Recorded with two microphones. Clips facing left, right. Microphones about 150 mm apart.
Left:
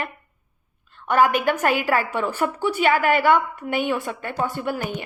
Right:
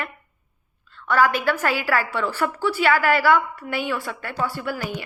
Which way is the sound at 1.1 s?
20° left (ahead or behind).